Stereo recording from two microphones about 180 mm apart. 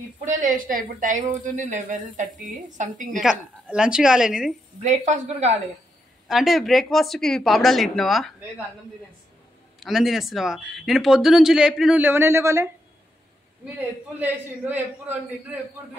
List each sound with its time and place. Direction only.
0.2 s a woman's voice: 45° right (ahead or behind)
3.2 s speech: 5° right (ahead or behind)
4.8 s speech: 40° right (ahead or behind)
6.2 s speech: centre (ahead or behind)
9.8 s speech: centre (ahead or behind)
13.7 s a man's voice: 10° right (ahead or behind)